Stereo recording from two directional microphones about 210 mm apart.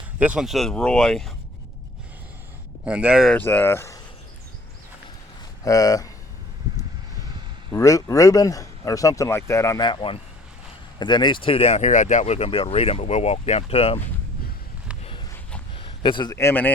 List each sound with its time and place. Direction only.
0.2 s speech: 5° right (ahead or behind)
2.8 s speech: 5° right (ahead or behind); by 4.0 s 15° left (ahead or behind)
5.6 s speech: 15° left (ahead or behind)
7.7 s speech: 15° left (ahead or behind)
15.7 s a man's voice: 25° left (ahead or behind)